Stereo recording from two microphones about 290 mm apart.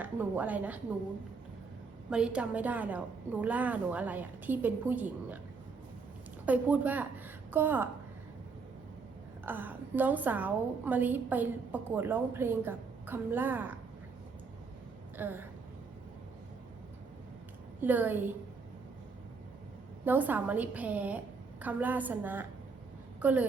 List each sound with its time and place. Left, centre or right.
0.0 s a woman's voice: centre
2.0 s a woman's voice: centre
6.4 s a woman's voice: centre
9.5 s a woman's voice: centre
15.2 s a woman's voice: centre
17.7 s a woman's voice: centre
20.1 s a woman's voice: centre